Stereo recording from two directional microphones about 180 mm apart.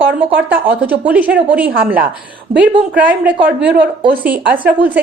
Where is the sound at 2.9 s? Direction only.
10° right (ahead or behind).